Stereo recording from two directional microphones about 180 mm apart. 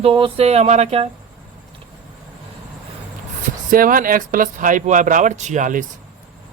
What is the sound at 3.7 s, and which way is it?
Speech, 50° right (ahead or behind).